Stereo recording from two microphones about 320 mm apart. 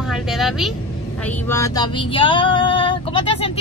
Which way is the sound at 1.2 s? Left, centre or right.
Centre.